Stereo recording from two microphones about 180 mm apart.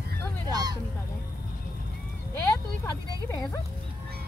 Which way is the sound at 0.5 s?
20° right (ahead or behind).